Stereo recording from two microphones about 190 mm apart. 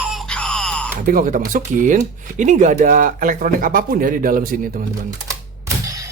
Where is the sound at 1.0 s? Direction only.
45° right (ahead or behind).